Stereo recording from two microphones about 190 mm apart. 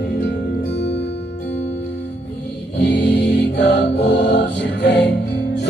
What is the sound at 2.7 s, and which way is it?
Music, 65° left (ahead or behind).